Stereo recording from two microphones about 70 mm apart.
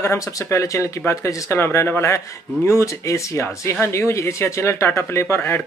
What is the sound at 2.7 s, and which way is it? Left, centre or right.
Speech, left.